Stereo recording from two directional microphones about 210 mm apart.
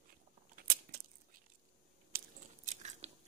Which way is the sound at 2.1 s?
45° right (ahead or behind).